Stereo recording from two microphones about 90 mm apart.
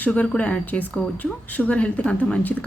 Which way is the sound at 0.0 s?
15° left (ahead or behind).